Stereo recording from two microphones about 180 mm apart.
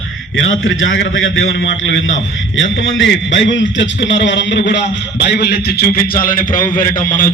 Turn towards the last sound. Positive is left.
turn(degrees=50)  # may be behind; listen again after turning